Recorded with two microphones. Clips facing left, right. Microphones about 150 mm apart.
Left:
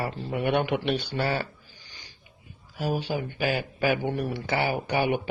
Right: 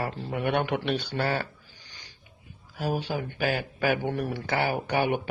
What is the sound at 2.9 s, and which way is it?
Speech, 10° left (ahead or behind).